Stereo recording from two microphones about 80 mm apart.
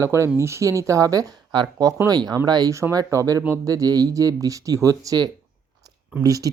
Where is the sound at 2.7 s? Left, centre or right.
Right.